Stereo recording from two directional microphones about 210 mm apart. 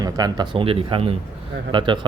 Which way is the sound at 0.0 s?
20° right (ahead or behind).